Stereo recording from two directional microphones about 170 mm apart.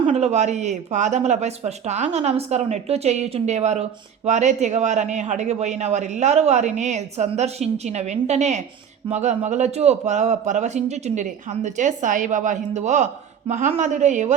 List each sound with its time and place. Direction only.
0.0 s a man's voice: 40° right (ahead or behind)